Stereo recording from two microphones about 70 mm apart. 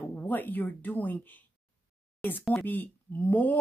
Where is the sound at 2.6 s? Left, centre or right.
Left.